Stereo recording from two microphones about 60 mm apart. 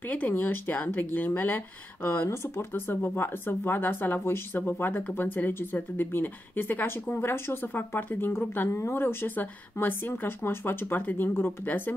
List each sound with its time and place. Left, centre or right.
0.3 s speech: left
2.2 s speech: left